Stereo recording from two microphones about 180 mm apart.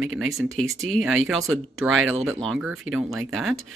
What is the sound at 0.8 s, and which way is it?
Speech, centre (ahead or behind).